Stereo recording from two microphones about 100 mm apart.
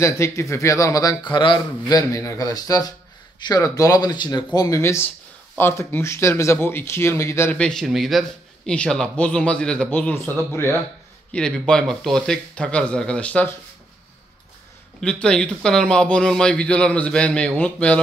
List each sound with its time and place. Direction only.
0.0 s a man's voice: 30° left (ahead or behind); by 4.5 s 45° left (ahead or behind)
4.6 s speech: 30° left (ahead or behind)
7.5 s a man's voice: 10° left (ahead or behind)
7.8 s a man's voice: centre (ahead or behind); by 10.3 s 15° left (ahead or behind)
11.3 s a man's voice: 10° left (ahead or behind)
15.0 s a man's voice: 10° left (ahead or behind)